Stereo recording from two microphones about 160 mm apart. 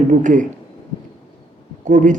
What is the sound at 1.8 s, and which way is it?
Speech, 50° right (ahead or behind).